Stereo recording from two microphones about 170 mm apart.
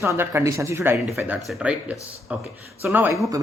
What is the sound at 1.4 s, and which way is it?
Speech, centre (ahead or behind).